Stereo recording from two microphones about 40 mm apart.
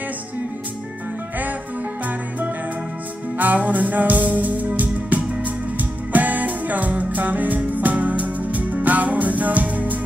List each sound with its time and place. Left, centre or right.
3.3 s music: right